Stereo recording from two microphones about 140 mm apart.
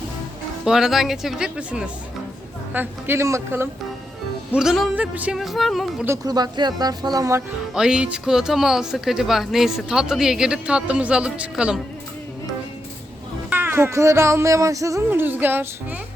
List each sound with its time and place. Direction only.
0.6 s speech: 5° right (ahead or behind)
2.7 s speech: 20° right (ahead or behind)
4.5 s speech: 5° right (ahead or behind)
6.1 s speech: 30° right (ahead or behind)
7.7 s speech: 5° right (ahead or behind)
13.5 s speech: 15° right (ahead or behind)